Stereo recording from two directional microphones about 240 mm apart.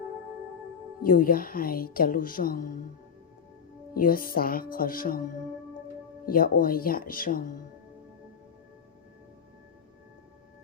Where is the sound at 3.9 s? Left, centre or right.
Left.